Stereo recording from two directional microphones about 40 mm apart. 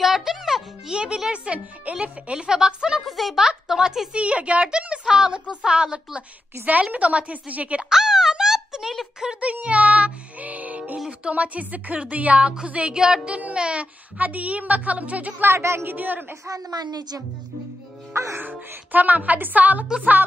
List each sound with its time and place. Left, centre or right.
0.0 s music: centre
0.9 s a woman's voice: right
1.3 s speech: right
2.3 s a woman's voice: centre
3.1 s speech: centre
3.3 s speech: centre
4.1 s a woman's voice: right
6.6 s speech: right
7.9 s a sound: centre
9.4 s speech: right
12.9 s a woman's voice: centre
14.1 s speech: right
15.4 s a woman's voice: right
18.9 s a woman's voice: right